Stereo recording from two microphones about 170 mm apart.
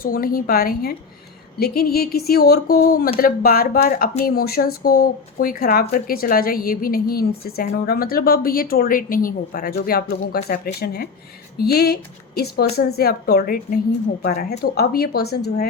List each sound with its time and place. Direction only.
0.0 s a woman's voice: 60° left (ahead or behind)